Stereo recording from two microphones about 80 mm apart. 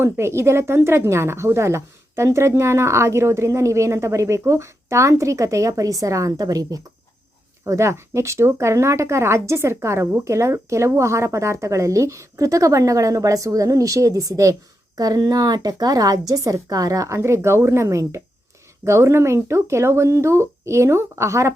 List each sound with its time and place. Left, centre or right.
0.0 s speech: right
7.6 s a woman's voice: right